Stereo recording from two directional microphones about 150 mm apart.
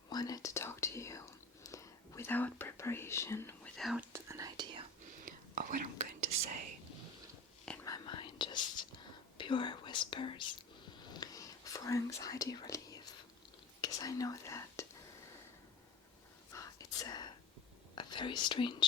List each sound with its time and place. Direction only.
0.1 s whispering: 25° left (ahead or behind)
3.8 s speech: centre (ahead or behind)
4.1 s whispering: 20° right (ahead or behind)
5.2 s whispering: 60° right (ahead or behind)
7.6 s whispering: 5° left (ahead or behind)
7.9 s whispering: 30° left (ahead or behind)
16.5 s whispering: 20° left (ahead or behind)